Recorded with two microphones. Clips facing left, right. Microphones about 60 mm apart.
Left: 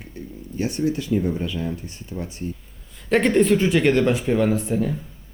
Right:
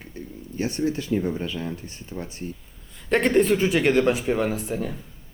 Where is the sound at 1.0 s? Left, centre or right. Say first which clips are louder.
Left 2 dB; right.